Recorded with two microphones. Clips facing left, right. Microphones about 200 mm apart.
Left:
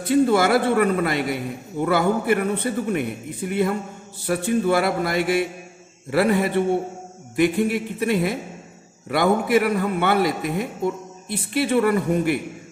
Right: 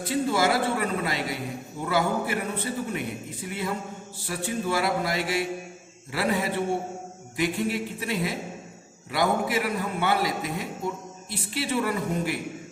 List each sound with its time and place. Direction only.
0.1 s a man's voice: 55° left (ahead or behind)
7.3 s a man's voice: 60° left (ahead or behind)